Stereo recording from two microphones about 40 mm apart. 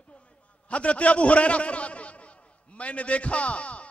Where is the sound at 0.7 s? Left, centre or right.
Left.